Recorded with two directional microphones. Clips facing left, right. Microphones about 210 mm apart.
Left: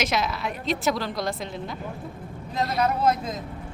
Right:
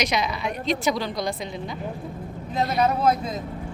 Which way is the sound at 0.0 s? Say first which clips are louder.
Right 1 dB; centre (ahead or behind).